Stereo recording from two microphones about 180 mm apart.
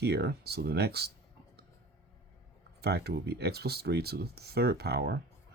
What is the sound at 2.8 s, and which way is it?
Speech, 65° right (ahead or behind).